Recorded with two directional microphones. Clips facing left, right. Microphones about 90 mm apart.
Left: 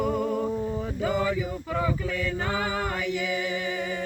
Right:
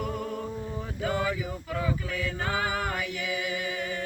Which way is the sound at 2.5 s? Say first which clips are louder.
Left 1 dB; 30° left (ahead or behind).